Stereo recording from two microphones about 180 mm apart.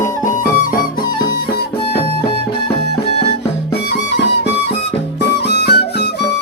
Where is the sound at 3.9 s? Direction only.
70° left (ahead or behind).